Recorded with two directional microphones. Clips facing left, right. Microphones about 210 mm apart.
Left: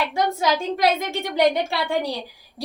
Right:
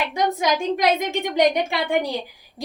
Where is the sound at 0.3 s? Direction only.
15° right (ahead or behind).